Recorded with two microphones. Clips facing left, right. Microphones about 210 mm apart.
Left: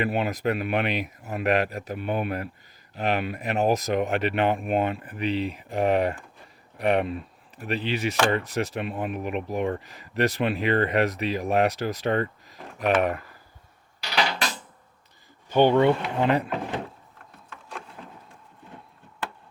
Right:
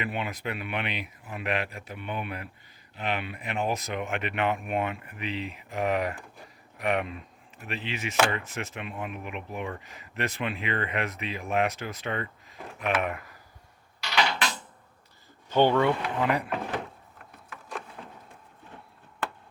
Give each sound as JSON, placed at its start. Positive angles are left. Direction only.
{"t": 0.0, "sound": "speech", "side_deg": 40}
{"t": 15.4, "sound": "speech", "side_deg": 15}
{"t": 17.5, "sound": "wood", "side_deg": -5}